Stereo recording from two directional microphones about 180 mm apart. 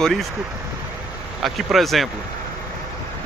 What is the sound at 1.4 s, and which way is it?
Speech, centre (ahead or behind).